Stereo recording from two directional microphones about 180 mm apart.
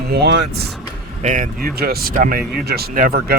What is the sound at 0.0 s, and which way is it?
Speech, 65° right (ahead or behind).